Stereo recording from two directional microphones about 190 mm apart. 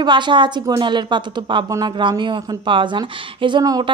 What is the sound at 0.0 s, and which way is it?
A woman's voice, 25° right (ahead or behind).